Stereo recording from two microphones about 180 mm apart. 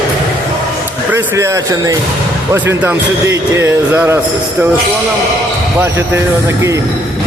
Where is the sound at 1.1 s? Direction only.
15° right (ahead or behind).